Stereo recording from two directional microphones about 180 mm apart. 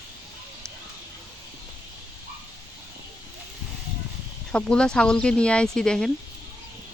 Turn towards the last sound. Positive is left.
turn(degrees=5)  # may be behind; listen again after turning